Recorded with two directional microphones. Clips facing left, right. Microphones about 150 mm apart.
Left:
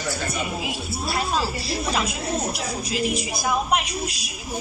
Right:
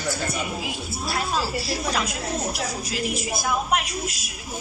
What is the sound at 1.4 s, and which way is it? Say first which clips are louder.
Speech: even; 25° left (ahead or behind).